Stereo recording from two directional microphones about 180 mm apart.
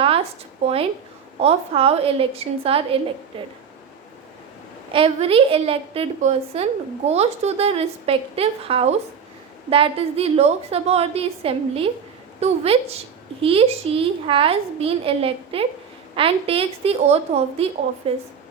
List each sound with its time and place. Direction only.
0.0 s a sound: 30° right (ahead or behind)
0.6 s a woman's voice: 35° right (ahead or behind)
4.9 s a woman's voice: 30° right (ahead or behind)